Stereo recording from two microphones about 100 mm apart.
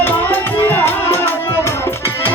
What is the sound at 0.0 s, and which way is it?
Tabla, 20° left (ahead or behind).